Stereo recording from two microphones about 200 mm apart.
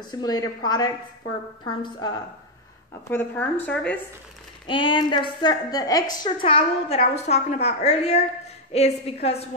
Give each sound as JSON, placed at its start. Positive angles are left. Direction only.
{"t": 0.1, "sound": "a woman's voice", "side_deg": 20}
{"t": 2.9, "sound": "a woman's voice", "side_deg": 10}
{"t": 4.6, "sound": "a woman's voice", "side_deg": 25}
{"t": 6.2, "sound": "a woman's voice", "side_deg": 30}